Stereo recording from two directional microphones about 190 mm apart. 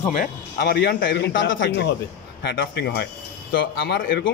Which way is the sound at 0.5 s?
60° left (ahead or behind).